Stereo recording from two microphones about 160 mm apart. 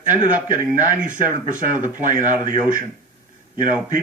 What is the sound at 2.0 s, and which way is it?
Speech, 55° right (ahead or behind).